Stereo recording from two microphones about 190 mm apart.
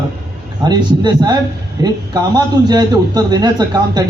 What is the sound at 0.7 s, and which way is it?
A man's voice, 20° right (ahead or behind).